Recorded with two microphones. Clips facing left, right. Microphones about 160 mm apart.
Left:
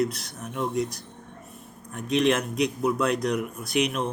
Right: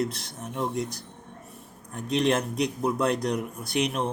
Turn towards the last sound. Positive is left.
turn(degrees=-30)  # may be behind; listen again after turning